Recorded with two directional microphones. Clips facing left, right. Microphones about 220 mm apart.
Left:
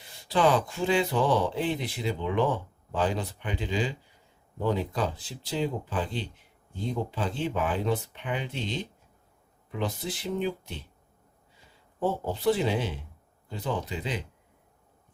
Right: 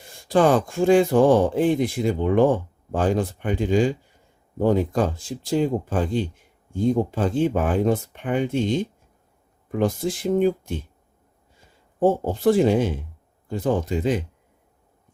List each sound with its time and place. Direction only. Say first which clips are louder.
0.0 s speech: right 6 dB; 50° right (ahead or behind)
11.9 s speech: right 9 dB; 50° right (ahead or behind)